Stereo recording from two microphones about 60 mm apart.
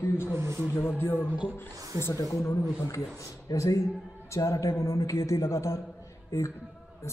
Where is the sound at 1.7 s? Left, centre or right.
Right.